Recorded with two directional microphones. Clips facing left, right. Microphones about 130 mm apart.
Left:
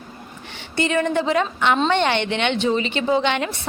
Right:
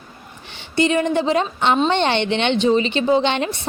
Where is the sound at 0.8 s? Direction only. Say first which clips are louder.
Right 3 dB; 20° right (ahead or behind).